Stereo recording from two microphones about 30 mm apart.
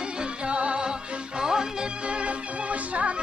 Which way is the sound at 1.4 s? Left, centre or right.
Right.